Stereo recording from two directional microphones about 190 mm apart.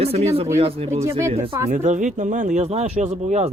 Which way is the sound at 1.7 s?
40° right (ahead or behind).